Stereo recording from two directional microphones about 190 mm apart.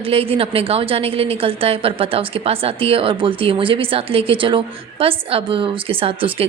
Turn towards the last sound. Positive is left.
turn(degrees=-30)  # may be behind; listen again after turning